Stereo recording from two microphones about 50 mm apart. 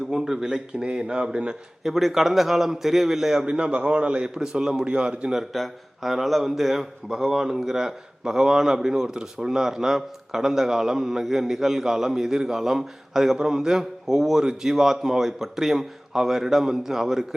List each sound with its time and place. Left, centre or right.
0.1 s a man's voice: centre
1.8 s a man's voice: centre
3.4 s a man's voice: centre
5.3 s a man's voice: centre